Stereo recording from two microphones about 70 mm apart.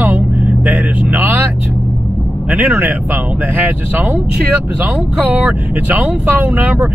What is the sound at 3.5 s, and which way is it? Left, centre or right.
Speech, right.